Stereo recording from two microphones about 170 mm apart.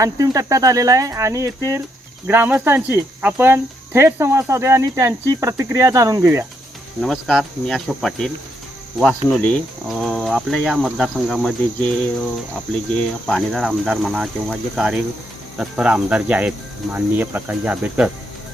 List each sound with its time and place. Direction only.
0.0 s speech: 20° right (ahead or behind)
7.0 s speech: centre (ahead or behind)
13.0 s speech: centre (ahead or behind)